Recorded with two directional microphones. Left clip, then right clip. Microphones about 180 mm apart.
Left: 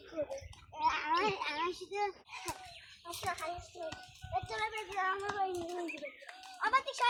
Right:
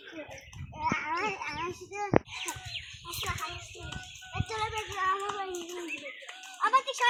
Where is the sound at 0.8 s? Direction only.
20° right (ahead or behind).